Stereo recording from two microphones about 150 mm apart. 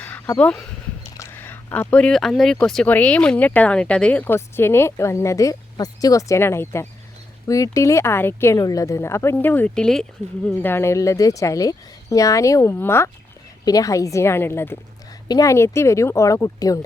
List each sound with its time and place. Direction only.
0.0 s dog: 10° left (ahead or behind)
1.1 s speech: 15° left (ahead or behind)